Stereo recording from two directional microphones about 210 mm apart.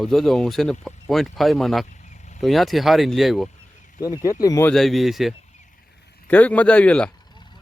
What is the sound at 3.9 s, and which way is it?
Speech, 15° left (ahead or behind).